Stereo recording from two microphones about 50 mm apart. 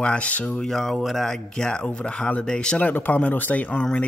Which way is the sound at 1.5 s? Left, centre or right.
Centre.